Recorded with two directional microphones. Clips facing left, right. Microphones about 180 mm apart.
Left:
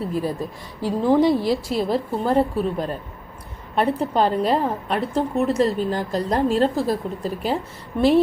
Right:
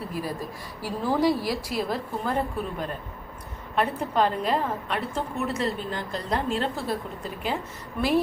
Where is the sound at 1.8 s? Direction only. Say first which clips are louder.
Left 7 dB; 30° left (ahead or behind).